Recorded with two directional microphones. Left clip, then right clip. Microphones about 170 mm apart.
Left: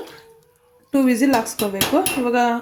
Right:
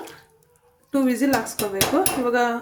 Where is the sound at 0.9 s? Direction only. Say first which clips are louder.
Left 4 dB; 40° left (ahead or behind).